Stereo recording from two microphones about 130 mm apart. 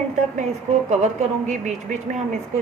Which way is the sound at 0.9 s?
60° right (ahead or behind).